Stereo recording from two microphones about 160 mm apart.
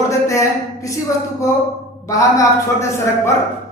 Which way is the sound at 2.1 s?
20° left (ahead or behind).